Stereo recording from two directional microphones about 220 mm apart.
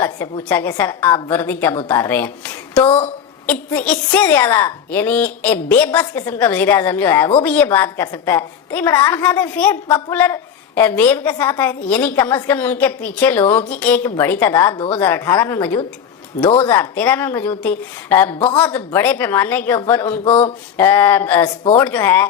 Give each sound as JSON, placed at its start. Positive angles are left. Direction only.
{"t": 0.0, "sound": "a woman's voice", "side_deg": 10}
{"t": 2.7, "sound": "a woman's voice", "side_deg": 25}
{"t": 3.4, "sound": "a woman's voice", "side_deg": 5}
{"t": 16.4, "sound": "a woman's voice", "side_deg": 25}
{"t": 16.6, "sound": "a woman's voice", "side_deg": 10}
{"t": 18.3, "sound": "a woman's voice", "side_deg": 25}
{"t": 18.9, "sound": "a woman's voice", "side_deg": 10}
{"t": 20.2, "sound": "a woman's voice", "side_deg": 25}
{"t": 20.7, "sound": "a woman's voice", "side_deg": 10}